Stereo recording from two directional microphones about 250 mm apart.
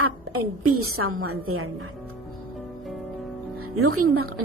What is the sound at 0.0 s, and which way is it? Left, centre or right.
A woman's voice, right.